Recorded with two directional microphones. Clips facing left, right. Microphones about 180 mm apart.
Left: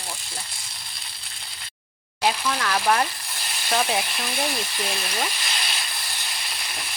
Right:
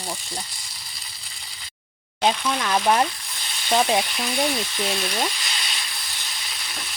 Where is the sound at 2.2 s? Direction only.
20° right (ahead or behind).